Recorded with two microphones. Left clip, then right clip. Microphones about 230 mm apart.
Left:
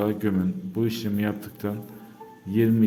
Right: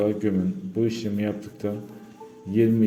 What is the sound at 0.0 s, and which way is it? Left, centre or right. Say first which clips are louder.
A man's voice: right 2 dB; left.